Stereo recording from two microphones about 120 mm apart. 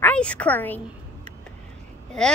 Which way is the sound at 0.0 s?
10° left (ahead or behind).